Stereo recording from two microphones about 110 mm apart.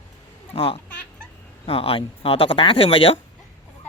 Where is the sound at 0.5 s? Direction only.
60° left (ahead or behind).